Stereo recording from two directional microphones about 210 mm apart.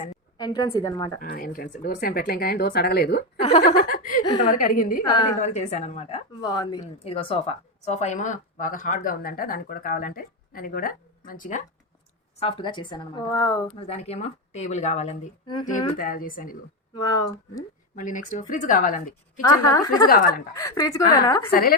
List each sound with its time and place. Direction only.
0.3 s a woman's voice: 20° left (ahead or behind)
1.2 s speech: 45° left (ahead or behind)
3.4 s a woman's voice: 30° left (ahead or behind)
5.0 s a woman's voice: 20° left (ahead or behind)
5.4 s a woman's voice: 35° left (ahead or behind)
6.4 s a woman's voice: 20° left (ahead or behind); by 11.6 s 40° left (ahead or behind)
12.4 s a woman's voice: 25° left (ahead or behind)
13.7 s a woman's voice: 30° left (ahead or behind)
17.0 s speech: 15° left (ahead or behind)
18.0 s a woman's voice: 35° left (ahead or behind)
19.4 s speech: 15° left (ahead or behind)
20.1 s speech: 45° left (ahead or behind)
20.5 s speech: 15° left (ahead or behind)
21.5 s speech: 45° left (ahead or behind)